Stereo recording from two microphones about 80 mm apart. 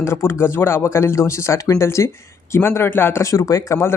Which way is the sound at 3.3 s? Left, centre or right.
Left.